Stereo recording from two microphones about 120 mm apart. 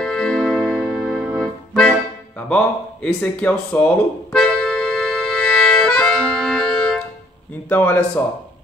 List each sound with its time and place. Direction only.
0.0 s music: 5° left (ahead or behind)
1.8 s speech: 10° left (ahead or behind)
4.3 s music: 5° left (ahead or behind)
7.7 s speech: 15° left (ahead or behind)